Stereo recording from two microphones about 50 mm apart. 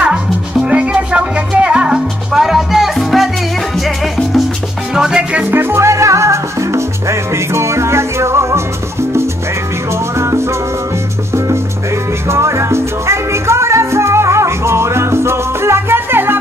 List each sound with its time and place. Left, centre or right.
0.7 s music: right
2.3 s music: centre
4.9 s music: centre
5.5 s salsa music: right
5.8 s salsa music: right
9.9 s music: right